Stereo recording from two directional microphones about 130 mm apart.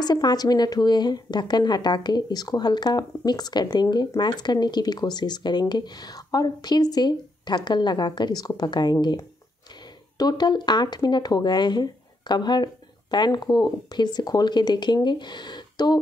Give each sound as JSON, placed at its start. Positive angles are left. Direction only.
{"t": 0.0, "sound": "a woman's voice", "side_deg": 30}